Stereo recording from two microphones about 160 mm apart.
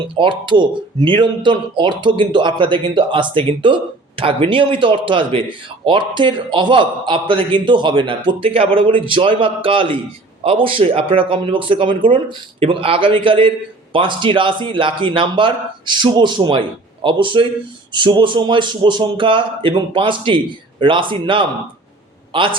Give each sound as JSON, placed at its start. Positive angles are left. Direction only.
{"t": 0.0, "sound": "a man's voice", "side_deg": -30}